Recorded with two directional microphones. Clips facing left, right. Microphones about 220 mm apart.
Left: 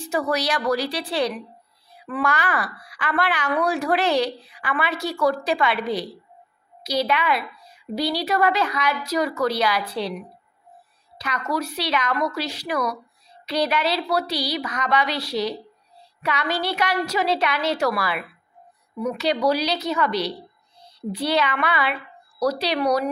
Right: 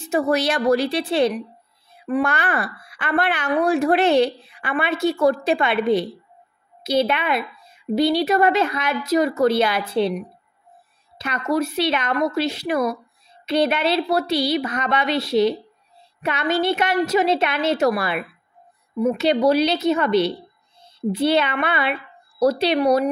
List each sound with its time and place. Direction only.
0.0 s a woman's voice: 25° right (ahead or behind)
2.5 s a woman's voice: 25° right (ahead or behind)
6.8 s a sound: 25° right (ahead or behind)
7.2 s a woman's voice: 25° right (ahead or behind)
11.1 s a woman's voice: 25° right (ahead or behind)